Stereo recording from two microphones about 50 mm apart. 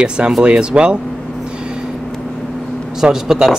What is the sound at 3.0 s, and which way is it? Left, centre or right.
Speech, centre.